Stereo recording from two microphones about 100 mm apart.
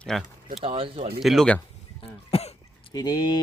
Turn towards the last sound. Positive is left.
turn(degrees=40)  # may be behind; listen again after turning